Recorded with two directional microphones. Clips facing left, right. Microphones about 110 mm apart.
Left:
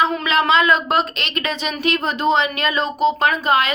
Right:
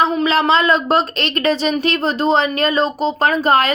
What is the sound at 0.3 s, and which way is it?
Speech, 35° right (ahead or behind).